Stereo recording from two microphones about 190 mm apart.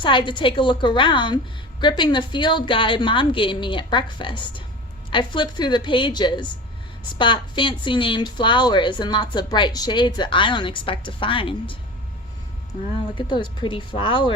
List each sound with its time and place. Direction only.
0.0 s a woman's voice: 25° left (ahead or behind)
13.1 s a woman's voice: 25° left (ahead or behind)